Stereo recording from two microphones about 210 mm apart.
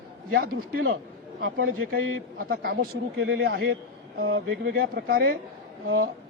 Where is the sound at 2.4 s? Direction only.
45° right (ahead or behind).